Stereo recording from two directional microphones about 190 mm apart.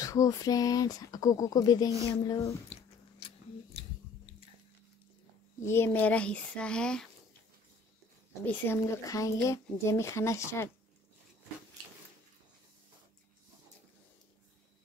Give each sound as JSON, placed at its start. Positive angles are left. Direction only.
{"t": 0.0, "sound": "speech", "side_deg": 15}
{"t": 2.7, "sound": "biting", "side_deg": 30}
{"t": 5.6, "sound": "speech", "side_deg": 15}
{"t": 8.5, "sound": "speech", "side_deg": 15}